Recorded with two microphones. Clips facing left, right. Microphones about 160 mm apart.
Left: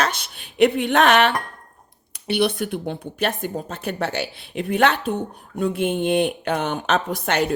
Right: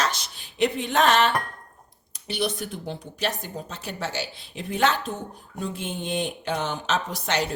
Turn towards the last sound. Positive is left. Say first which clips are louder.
# left 5 dB
turn(degrees=55)  # may be behind; listen again after turning